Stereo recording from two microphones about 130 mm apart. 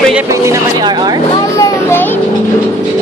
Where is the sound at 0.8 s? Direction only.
35° right (ahead or behind).